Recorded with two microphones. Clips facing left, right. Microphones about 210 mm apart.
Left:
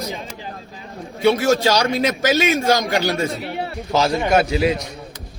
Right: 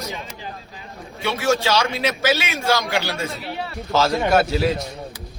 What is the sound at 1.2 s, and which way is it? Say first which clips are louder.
A man's voice: left 5 dB; 40° left (ahead or behind).